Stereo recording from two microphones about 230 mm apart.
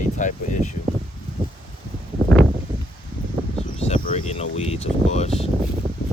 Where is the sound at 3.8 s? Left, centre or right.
Left.